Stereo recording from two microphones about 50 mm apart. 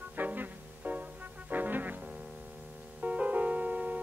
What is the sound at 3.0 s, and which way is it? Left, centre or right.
Music, right.